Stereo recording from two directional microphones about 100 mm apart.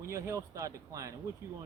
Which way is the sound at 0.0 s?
30° right (ahead or behind).